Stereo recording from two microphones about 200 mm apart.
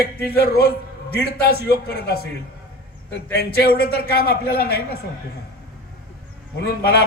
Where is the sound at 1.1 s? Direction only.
50° right (ahead or behind).